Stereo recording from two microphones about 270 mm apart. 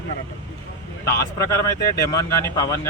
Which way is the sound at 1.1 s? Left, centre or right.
Centre.